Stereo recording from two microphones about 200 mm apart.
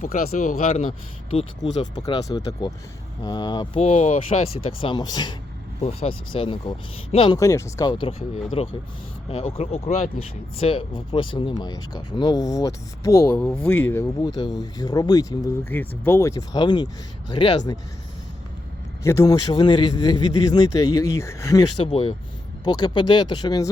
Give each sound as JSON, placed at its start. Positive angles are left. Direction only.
{"t": 0.0, "sound": "speech", "side_deg": 40}
{"t": 5.8, "sound": "speech", "side_deg": 30}
{"t": 19.0, "sound": "speech", "side_deg": 15}
{"t": 21.8, "sound": "speech", "side_deg": 25}